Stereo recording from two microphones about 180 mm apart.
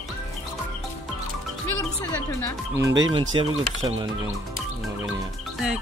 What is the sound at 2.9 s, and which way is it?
Speech, 90° right.